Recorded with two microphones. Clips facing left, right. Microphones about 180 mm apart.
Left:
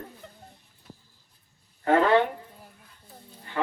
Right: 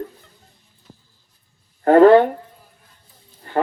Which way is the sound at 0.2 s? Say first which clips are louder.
Left 7 dB; 65° left (ahead or behind).